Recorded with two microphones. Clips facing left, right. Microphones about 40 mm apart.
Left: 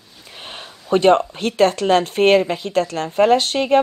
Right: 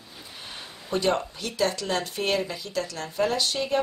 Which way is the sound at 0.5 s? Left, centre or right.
Left.